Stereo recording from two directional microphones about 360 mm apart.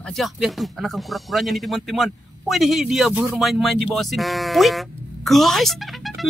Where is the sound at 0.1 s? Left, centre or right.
Centre.